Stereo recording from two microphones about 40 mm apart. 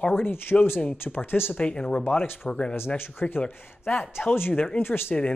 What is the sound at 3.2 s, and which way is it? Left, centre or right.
Speech, left.